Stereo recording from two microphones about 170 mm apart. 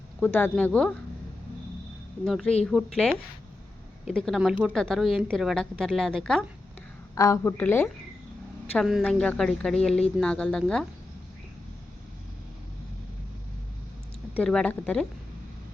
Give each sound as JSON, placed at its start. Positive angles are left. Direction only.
{"t": 0.2, "sound": "speech", "side_deg": 5}
{"t": 2.2, "sound": "a woman's voice", "side_deg": 5}
{"t": 7.2, "sound": "a woman's voice", "side_deg": 20}
{"t": 8.8, "sound": "a woman's voice", "side_deg": 0}
{"t": 14.3, "sound": "speech", "side_deg": 5}